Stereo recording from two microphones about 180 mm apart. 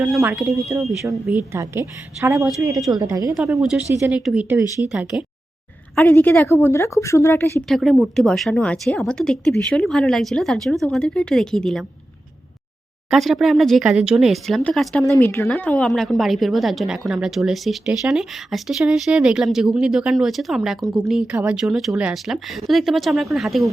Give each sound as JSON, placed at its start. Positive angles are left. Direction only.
{"t": 0.0, "sound": "a woman's voice", "side_deg": -5}
{"t": 4.0, "sound": "a woman's voice", "side_deg": -5}
{"t": 6.0, "sound": "a woman's voice", "side_deg": 10}
{"t": 7.7, "sound": "a woman's voice", "side_deg": 0}
{"t": 13.1, "sound": "a woman's voice", "side_deg": 0}